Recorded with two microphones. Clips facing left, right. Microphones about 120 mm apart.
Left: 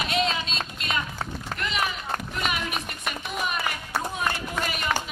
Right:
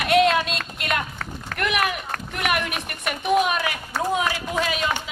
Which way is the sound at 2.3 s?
65° right (ahead or behind).